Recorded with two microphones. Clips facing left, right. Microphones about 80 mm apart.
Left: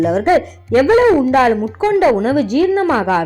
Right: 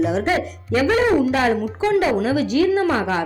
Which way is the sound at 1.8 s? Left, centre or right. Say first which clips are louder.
Left 5 dB; left.